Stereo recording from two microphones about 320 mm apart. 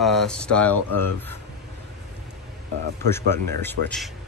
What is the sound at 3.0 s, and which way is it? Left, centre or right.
Speech, centre.